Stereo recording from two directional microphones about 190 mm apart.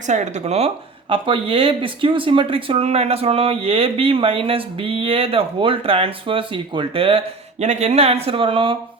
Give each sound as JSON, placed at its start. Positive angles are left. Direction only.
{"t": 0.1, "sound": "speech", "side_deg": -35}